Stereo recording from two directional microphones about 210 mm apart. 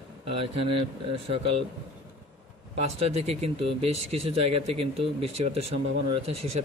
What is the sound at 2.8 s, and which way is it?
Speech, 30° right (ahead or behind).